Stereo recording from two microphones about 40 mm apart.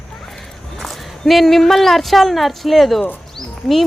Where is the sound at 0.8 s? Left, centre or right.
Centre.